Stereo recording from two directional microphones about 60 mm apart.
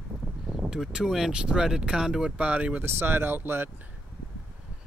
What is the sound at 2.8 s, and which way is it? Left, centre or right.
Speech, right.